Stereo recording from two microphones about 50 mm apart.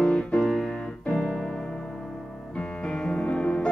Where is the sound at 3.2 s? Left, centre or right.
Left.